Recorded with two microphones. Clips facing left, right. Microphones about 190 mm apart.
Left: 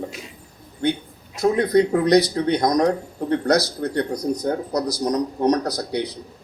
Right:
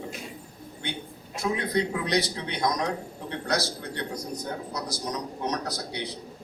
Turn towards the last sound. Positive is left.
turn(degrees=40)  # may be behind; listen again after turning